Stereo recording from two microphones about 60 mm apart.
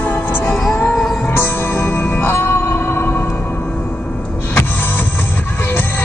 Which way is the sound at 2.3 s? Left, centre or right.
Left.